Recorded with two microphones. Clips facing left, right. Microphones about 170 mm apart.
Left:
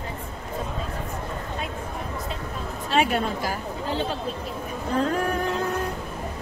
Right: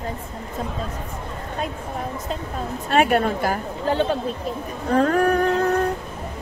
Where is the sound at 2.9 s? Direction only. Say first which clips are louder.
Right 5 dB; 60° right (ahead or behind).